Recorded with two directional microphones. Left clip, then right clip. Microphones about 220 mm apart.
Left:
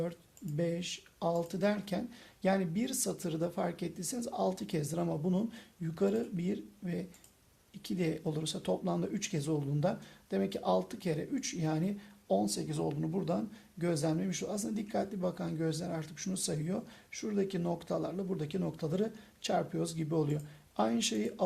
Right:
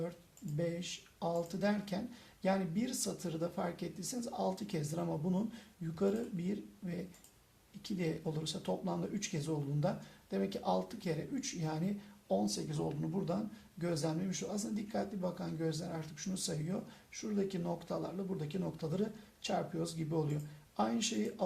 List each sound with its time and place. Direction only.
0.5 s speech: 45° left (ahead or behind)